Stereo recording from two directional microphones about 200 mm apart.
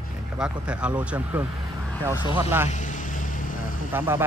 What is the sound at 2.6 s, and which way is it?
Vehicle, 40° left (ahead or behind).